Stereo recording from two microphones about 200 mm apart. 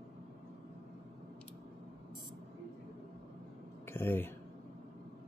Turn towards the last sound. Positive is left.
turn(degrees=10)  # may be behind; listen again after turning